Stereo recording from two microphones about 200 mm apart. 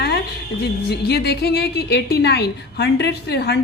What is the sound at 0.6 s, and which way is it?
A woman's voice, 55° left (ahead or behind).